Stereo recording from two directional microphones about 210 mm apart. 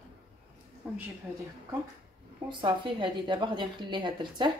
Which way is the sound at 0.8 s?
5° right (ahead or behind).